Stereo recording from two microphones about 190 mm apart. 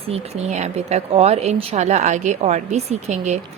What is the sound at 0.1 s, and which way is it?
Speech, 35° right (ahead or behind).